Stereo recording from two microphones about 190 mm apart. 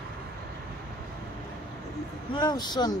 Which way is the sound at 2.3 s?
20° left (ahead or behind).